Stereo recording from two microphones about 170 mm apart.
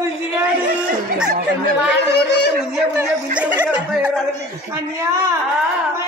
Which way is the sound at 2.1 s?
90° left.